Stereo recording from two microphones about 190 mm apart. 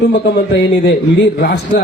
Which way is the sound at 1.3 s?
60° left (ahead or behind).